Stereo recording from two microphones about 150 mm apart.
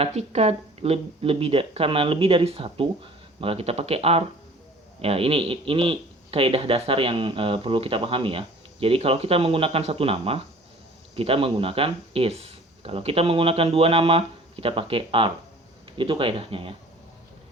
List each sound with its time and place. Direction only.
0.0 s speech: 45° right (ahead or behind)